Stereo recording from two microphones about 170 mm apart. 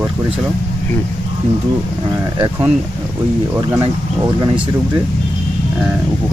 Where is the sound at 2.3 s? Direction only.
20° right (ahead or behind).